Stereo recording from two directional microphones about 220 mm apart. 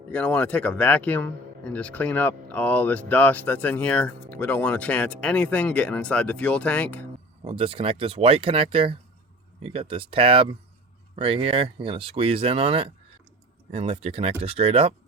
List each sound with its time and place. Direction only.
0.1 s speech: 5° left (ahead or behind)
7.4 s speech: 25° right (ahead or behind)